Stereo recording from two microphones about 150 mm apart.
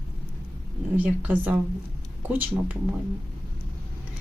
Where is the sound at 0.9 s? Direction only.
10° right (ahead or behind).